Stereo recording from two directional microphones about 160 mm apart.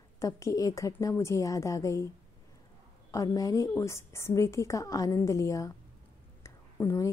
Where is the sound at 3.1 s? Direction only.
20° left (ahead or behind).